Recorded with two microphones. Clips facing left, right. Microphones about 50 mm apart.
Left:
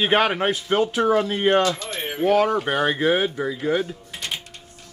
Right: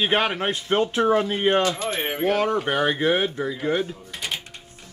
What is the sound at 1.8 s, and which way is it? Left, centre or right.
Speech, right.